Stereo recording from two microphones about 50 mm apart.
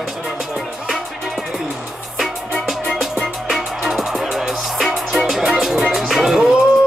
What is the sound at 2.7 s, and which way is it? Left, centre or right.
Music, centre.